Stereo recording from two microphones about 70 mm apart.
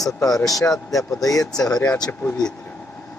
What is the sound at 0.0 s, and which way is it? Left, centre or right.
Speech, left.